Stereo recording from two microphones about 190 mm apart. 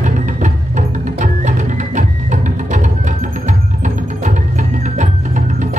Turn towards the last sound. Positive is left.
turn(degrees=-40)  # may be behind; listen again after turning